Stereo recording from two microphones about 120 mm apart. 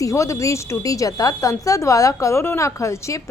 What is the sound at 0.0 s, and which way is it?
A woman's voice, 25° left (ahead or behind).